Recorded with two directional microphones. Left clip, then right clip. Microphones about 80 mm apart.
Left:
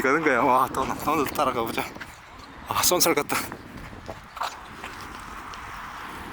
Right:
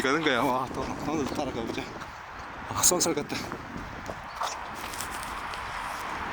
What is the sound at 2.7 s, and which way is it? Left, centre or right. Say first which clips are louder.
Speech: left 4 dB; left.